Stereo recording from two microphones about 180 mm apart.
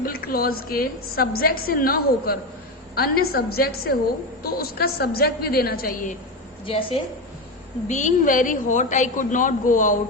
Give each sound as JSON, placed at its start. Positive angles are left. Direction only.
{"t": 0.0, "sound": "a woman's voice", "side_deg": 55}
{"t": 6.7, "sound": "a woman's voice", "side_deg": 30}
{"t": 7.9, "sound": "a woman's voice", "side_deg": 40}